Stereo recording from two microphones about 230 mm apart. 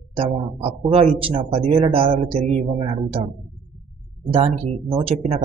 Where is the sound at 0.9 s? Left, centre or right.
Right.